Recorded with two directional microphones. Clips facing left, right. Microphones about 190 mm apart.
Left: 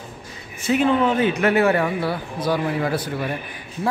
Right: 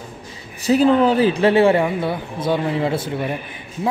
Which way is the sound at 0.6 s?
35° right (ahead or behind).